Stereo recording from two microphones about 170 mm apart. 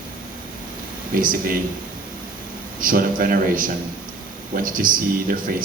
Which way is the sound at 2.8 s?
55° right (ahead or behind).